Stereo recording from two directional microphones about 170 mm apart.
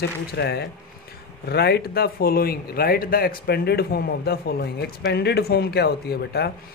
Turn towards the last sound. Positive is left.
turn(degrees=70)  # may be behind; listen again after turning